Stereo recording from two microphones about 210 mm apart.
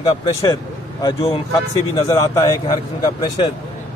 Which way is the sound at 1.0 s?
25° left (ahead or behind).